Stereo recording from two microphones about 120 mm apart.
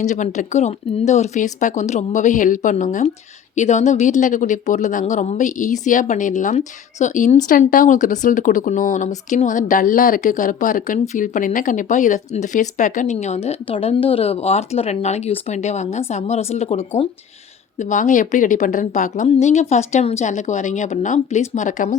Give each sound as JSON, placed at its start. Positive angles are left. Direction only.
{"t": 0.0, "sound": "a woman's voice", "side_deg": 85}
{"t": 17.7, "sound": "a woman's voice", "side_deg": 80}